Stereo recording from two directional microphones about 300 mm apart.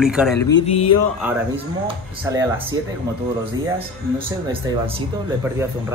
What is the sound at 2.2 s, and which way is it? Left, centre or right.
Speech, centre.